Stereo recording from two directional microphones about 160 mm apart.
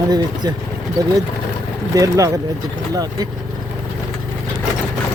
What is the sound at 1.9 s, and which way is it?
Speech, 20° right (ahead or behind).